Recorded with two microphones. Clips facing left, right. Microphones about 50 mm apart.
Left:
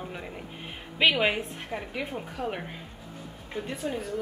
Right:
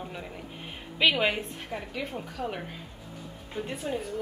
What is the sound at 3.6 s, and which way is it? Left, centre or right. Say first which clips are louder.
Speech: left 1 dB; centre.